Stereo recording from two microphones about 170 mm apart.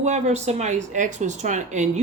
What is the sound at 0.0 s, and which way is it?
Speech, 40° right (ahead or behind).